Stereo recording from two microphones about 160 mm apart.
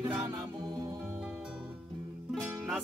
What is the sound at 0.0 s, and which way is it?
Music, 20° right (ahead or behind).